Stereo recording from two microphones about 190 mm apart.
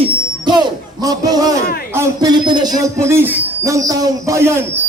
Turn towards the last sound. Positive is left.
turn(degrees=-15)  # may be behind; listen again after turning